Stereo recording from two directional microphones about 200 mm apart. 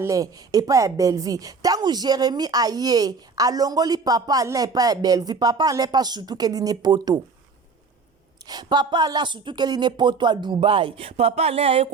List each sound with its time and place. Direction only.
0.0 s a woman's voice: 15° right (ahead or behind)
8.4 s a woman's voice: 20° right (ahead or behind)